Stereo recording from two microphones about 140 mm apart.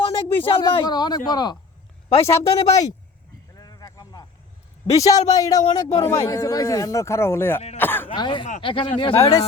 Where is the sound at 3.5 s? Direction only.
25° left (ahead or behind).